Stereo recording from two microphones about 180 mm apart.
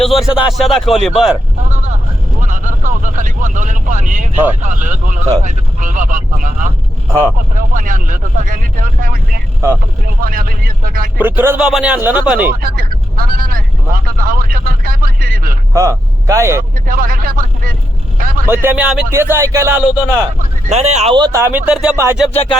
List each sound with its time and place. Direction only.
0.0 s speech: centre (ahead or behind)
2.4 s vehicle: 45° right (ahead or behind)
4.6 s speech: 45° right (ahead or behind)
7.5 s speech: 50° right (ahead or behind)
11.2 s speech: 10° right (ahead or behind)
12.5 s speech: 55° right (ahead or behind)
15.7 s speech: 15° right (ahead or behind)
16.8 s a man's voice: 50° right (ahead or behind)
18.5 s speech: 10° right (ahead or behind)
20.4 s speech: 40° right (ahead or behind)
21.2 s speech: 20° right (ahead or behind); by 22.0 s 5° right (ahead or behind)
22.3 s speech: 35° left (ahead or behind)